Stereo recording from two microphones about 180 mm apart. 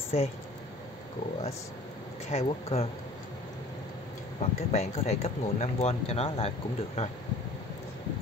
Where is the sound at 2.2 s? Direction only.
35° left (ahead or behind).